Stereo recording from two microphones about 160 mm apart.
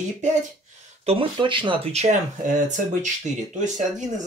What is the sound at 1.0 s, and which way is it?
Speech, 30° right (ahead or behind).